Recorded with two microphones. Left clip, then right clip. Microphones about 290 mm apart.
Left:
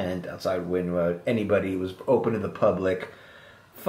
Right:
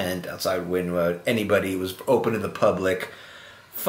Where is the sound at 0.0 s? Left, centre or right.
Centre.